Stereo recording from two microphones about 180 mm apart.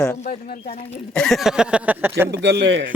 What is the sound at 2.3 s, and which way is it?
Speech, 70° right (ahead or behind).